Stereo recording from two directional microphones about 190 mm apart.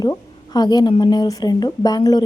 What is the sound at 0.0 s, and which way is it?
A woman's voice, 20° left (ahead or behind).